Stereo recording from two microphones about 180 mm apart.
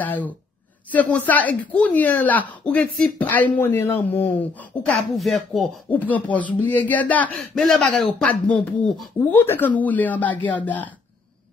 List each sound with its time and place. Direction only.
0.0 s speech: 10° left (ahead or behind)